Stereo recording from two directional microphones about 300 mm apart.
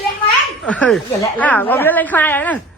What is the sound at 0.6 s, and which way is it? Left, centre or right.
A woman's voice, centre.